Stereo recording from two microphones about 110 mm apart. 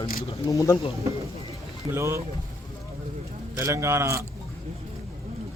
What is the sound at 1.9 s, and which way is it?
Speech, 25° right (ahead or behind).